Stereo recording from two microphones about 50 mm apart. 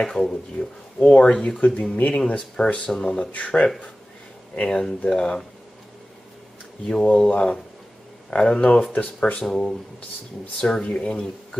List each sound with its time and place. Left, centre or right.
0.0 s speech: centre
3.3 s speech: left
4.6 s speech: centre
6.9 s speech: centre
9.4 s speech: centre